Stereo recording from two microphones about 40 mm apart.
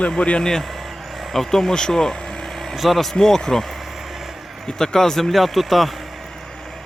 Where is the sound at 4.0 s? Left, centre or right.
Centre.